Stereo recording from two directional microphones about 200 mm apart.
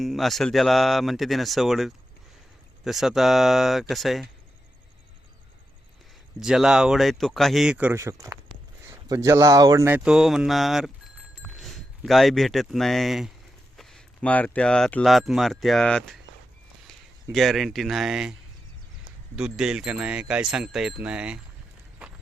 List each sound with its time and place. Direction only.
0.0 s speech: centre (ahead or behind)
6.4 s speech: 5° right (ahead or behind)
17.3 s speech: centre (ahead or behind)
19.4 s speech: 5° right (ahead or behind)